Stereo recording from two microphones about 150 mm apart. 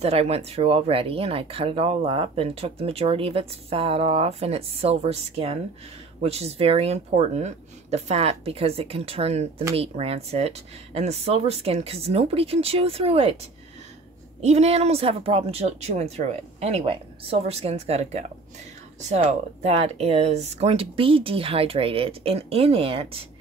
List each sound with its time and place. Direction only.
0.0 s speech: 40° right (ahead or behind)